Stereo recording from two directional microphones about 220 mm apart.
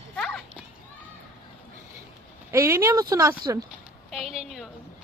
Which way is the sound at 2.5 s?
10° right (ahead or behind).